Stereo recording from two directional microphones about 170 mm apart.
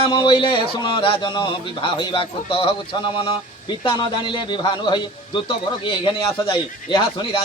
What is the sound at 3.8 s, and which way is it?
A man's voice, 30° left (ahead or behind).